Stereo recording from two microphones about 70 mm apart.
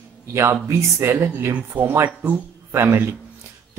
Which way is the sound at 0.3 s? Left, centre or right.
Right.